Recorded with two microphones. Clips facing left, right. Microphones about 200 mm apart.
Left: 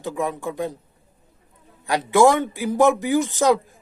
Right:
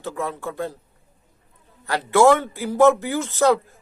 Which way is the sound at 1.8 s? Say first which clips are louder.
Even; 15° left (ahead or behind).